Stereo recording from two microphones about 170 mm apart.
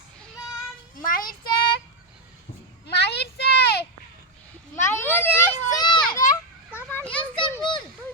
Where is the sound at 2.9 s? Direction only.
75° left (ahead or behind).